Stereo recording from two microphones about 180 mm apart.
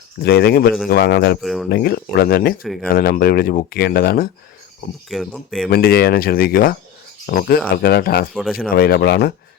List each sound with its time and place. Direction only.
0.2 s speech: 65° left (ahead or behind)
1.4 s speech: centre (ahead or behind)
1.7 s speech: 65° left (ahead or behind)
5.0 s speech: centre (ahead or behind)
5.7 s speech: 60° left (ahead or behind)
8.3 s speech: centre (ahead or behind)
8.7 s speech: 60° left (ahead or behind)